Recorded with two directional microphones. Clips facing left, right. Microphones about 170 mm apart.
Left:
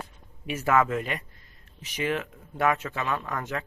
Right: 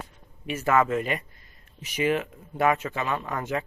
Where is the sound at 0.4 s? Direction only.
10° left (ahead or behind).